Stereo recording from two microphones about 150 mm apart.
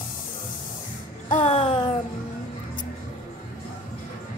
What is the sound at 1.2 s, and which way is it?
Music, 55° left (ahead or behind).